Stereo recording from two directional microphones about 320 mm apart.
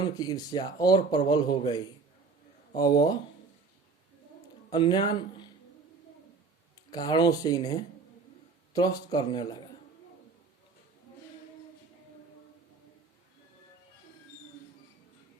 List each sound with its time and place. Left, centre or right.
0.0 s speech: centre
4.7 s speech: centre
6.9 s speech: centre